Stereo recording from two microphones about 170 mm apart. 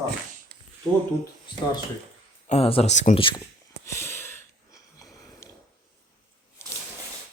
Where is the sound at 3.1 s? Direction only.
30° left (ahead or behind).